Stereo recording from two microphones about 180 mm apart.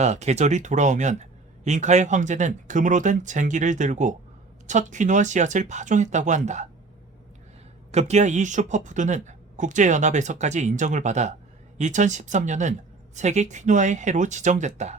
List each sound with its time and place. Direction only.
0.0 s speech: 40° right (ahead or behind)
7.9 s speech: 40° right (ahead or behind)